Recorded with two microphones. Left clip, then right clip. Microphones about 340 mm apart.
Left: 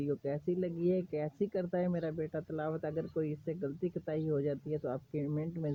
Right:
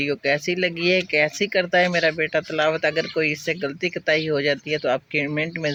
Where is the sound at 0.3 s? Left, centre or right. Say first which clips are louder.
Right 14 dB; left.